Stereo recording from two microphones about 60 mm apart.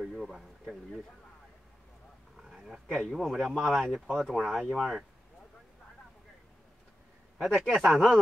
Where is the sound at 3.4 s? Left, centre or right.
Centre.